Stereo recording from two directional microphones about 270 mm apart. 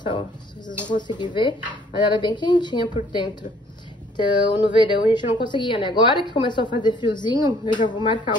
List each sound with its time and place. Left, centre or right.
0.7 s a woman's voice: centre